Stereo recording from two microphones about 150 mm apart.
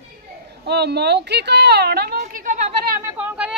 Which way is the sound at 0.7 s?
90° right.